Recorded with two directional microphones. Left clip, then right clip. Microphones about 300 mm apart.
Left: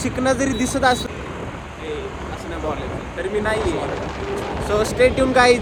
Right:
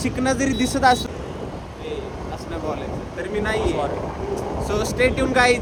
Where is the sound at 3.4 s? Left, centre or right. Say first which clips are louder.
Right 2 dB; centre.